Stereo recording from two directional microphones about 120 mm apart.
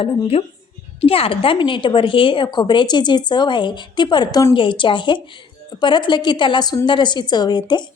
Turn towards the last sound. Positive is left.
turn(degrees=40)  # may be behind; listen again after turning